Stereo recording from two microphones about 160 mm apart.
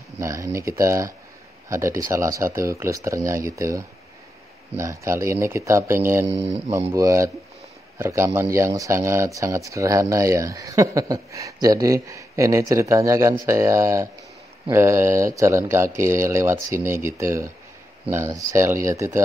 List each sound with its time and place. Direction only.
0.2 s speech: 20° right (ahead or behind)
6.2 s speech: 40° right (ahead or behind)
6.9 s speech: 20° right (ahead or behind)